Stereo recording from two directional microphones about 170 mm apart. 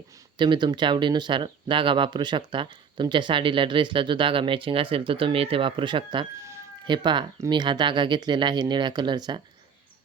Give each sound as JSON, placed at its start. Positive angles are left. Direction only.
{"t": 0.3, "sound": "speech", "side_deg": -25}